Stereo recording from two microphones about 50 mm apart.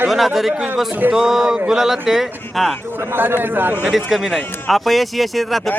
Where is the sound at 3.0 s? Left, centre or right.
Right.